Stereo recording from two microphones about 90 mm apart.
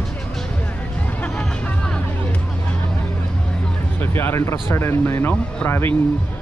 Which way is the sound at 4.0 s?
25° left (ahead or behind).